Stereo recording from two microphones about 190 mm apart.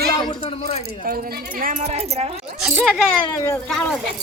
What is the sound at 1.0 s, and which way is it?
Speech, 50° right (ahead or behind).